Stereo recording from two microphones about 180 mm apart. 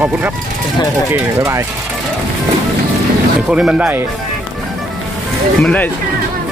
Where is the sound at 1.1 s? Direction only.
15° right (ahead or behind).